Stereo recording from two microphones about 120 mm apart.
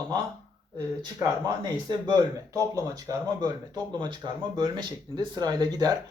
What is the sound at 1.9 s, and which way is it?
Speech, 35° right (ahead or behind).